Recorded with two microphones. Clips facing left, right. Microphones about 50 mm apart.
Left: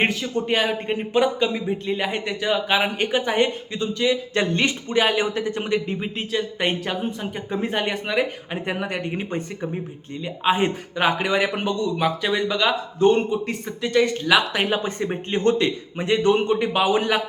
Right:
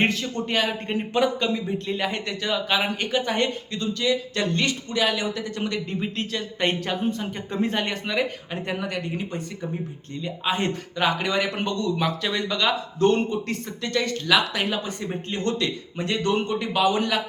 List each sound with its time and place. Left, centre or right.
0.0 s speech: centre; by 9.6 s left
10.2 s a man's voice: centre